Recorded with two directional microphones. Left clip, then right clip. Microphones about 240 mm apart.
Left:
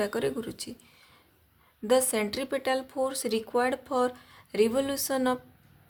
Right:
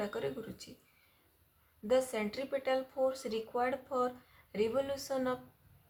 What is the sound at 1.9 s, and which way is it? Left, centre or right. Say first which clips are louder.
Speech: left 7 dB; left.